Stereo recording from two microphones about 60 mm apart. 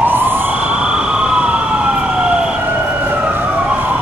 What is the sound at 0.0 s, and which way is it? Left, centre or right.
Emergency vehicle, right.